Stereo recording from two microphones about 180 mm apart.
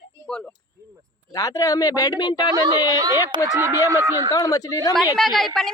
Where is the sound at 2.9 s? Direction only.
20° right (ahead or behind).